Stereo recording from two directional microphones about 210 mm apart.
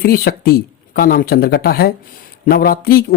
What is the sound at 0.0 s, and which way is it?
Speech, 45° left (ahead or behind).